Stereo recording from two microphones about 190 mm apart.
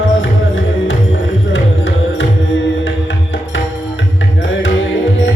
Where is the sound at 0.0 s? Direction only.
80° left.